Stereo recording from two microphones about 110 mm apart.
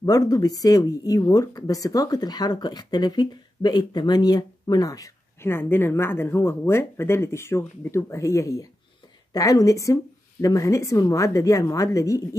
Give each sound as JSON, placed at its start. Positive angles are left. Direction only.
{"t": 0.0, "sound": "a woman's voice", "side_deg": 35}